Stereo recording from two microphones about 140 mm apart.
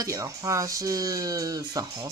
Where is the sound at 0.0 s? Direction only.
25° right (ahead or behind).